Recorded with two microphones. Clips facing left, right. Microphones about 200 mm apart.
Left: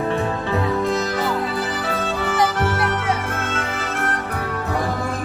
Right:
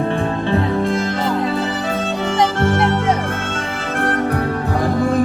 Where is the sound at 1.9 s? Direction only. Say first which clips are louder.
Right 3 dB; 25° right (ahead or behind).